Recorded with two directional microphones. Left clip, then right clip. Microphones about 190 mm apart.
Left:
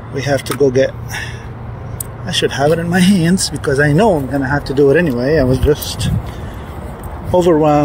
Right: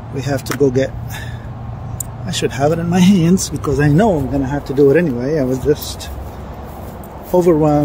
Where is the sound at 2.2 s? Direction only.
15° right (ahead or behind).